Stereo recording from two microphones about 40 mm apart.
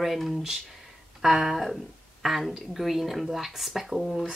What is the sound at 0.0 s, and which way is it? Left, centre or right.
Speech, centre.